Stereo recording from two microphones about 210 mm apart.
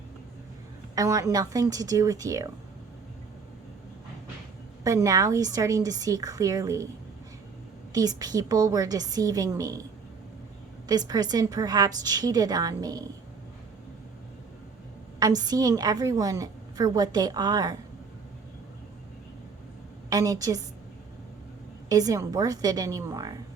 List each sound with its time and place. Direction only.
0.9 s a woman's voice: 15° right (ahead or behind)
4.8 s a woman's voice: 15° right (ahead or behind)
7.9 s a woman's voice: 15° right (ahead or behind)
10.8 s a woman's voice: 20° right (ahead or behind)
15.2 s a woman's voice: 20° right (ahead or behind)
20.1 s a woman's voice: 15° right (ahead or behind)
21.8 s a woman's voice: 15° right (ahead or behind)